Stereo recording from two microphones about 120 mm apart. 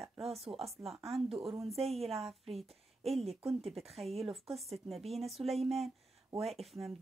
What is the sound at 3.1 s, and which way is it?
Speech, 55° right (ahead or behind).